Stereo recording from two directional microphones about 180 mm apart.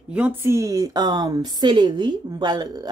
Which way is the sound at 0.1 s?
10° right (ahead or behind).